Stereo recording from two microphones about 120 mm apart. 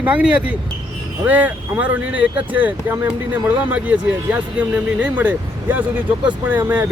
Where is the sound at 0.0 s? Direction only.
10° right (ahead or behind).